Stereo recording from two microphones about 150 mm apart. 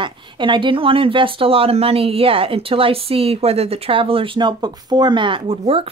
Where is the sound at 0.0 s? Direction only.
30° right (ahead or behind).